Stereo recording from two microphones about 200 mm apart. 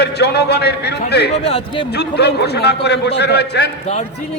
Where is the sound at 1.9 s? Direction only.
55° left (ahead or behind).